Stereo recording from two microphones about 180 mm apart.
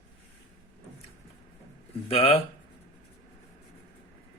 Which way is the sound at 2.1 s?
35° left (ahead or behind).